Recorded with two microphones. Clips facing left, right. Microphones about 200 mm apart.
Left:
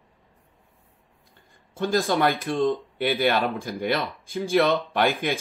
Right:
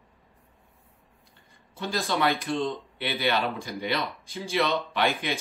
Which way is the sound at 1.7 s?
50° left (ahead or behind).